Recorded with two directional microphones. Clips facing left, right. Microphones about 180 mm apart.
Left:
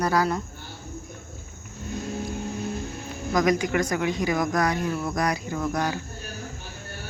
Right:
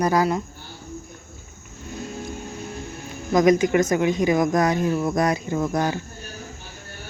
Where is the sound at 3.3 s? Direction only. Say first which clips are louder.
Right 6 dB; 20° right (ahead or behind).